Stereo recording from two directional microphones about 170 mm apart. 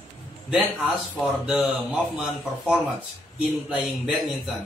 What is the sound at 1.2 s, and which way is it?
Speech, centre (ahead or behind).